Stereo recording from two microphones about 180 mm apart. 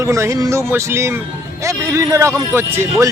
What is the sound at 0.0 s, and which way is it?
Speech, 15° right (ahead or behind).